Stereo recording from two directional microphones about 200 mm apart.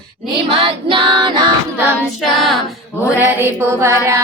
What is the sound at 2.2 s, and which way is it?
Child singing, centre (ahead or behind).